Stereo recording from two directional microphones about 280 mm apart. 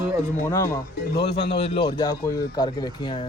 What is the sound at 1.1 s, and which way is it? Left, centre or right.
Speech, left.